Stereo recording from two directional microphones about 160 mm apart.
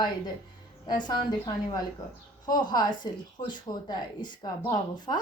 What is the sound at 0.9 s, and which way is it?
A woman's voice, 30° left (ahead or behind).